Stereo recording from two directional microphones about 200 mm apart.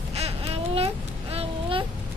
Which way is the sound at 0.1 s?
30° right (ahead or behind).